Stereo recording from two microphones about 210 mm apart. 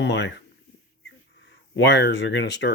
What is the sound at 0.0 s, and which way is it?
Speech, 55° left (ahead or behind).